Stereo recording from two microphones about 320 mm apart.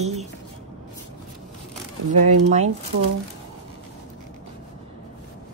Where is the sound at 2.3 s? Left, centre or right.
Right.